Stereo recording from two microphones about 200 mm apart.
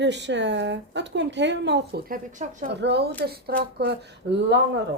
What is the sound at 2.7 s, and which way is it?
A woman's voice, 55° right (ahead or behind).